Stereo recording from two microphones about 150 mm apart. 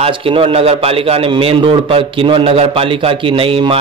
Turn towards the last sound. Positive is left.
turn(degrees=-35)  # may be behind; listen again after turning